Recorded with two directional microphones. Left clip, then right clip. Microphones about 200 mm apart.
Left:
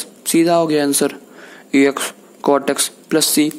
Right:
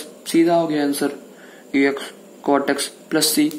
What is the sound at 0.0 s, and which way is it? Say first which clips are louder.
Speech: left 2 dB; 35° left (ahead or behind).